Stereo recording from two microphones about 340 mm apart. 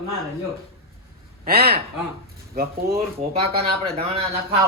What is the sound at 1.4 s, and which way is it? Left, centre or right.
Speech, right.